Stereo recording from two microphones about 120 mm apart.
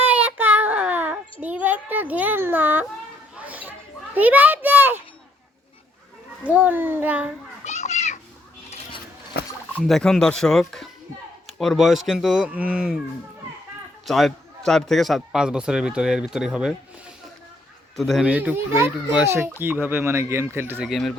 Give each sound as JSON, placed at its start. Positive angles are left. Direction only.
{"t": 0.0, "sound": "child singing", "side_deg": -15}
{"t": 3.3, "sound": "children playing", "side_deg": -15}
{"t": 6.4, "sound": "speech", "side_deg": -15}
{"t": 7.6, "sound": "children playing", "side_deg": 75}
{"t": 9.8, "sound": "a man's voice", "side_deg": 0}
{"t": 14.0, "sound": "a man's voice", "side_deg": 0}
{"t": 17.9, "sound": "a man's voice", "side_deg": 0}
{"t": 18.3, "sound": "speech", "side_deg": -10}
{"t": 20.8, "sound": "a man's voice", "side_deg": 0}